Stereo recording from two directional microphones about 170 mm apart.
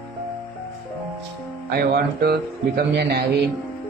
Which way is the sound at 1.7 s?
65° right (ahead or behind).